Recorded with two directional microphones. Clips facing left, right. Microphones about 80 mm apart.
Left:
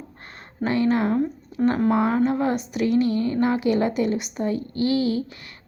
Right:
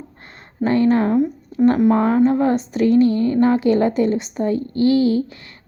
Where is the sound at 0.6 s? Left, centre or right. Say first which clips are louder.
Right 5 dB; right.